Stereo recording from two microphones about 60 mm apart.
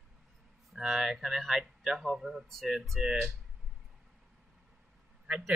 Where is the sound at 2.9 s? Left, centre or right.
Centre.